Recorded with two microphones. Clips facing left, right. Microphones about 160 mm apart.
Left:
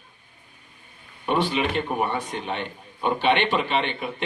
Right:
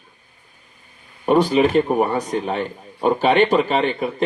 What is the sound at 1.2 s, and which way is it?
A man's voice, 40° right (ahead or behind).